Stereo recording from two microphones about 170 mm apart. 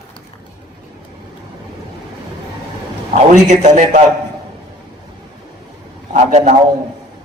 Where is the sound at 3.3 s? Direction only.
45° right (ahead or behind).